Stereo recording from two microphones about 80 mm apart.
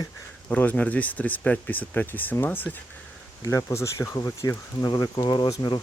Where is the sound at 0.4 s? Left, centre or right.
Left.